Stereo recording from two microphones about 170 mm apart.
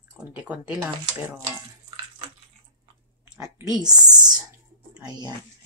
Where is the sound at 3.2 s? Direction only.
20° right (ahead or behind).